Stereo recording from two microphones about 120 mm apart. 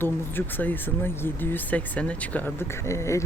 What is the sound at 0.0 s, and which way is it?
Speech, 15° left (ahead or behind).